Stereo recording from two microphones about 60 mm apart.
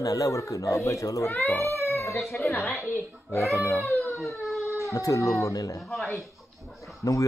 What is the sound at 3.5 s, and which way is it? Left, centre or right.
Speech, left.